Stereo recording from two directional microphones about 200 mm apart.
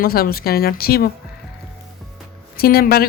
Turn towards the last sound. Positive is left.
turn(degrees=50)  # may be behind; listen again after turning